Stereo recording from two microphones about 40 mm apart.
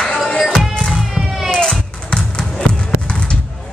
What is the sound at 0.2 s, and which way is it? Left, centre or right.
Music, centre.